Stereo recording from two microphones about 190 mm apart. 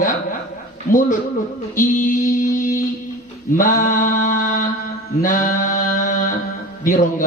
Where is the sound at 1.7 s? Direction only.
45° left (ahead or behind).